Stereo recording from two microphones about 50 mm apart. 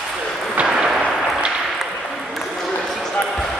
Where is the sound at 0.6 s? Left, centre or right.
Centre.